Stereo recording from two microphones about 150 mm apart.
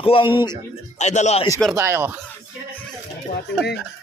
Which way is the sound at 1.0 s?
50° left (ahead or behind).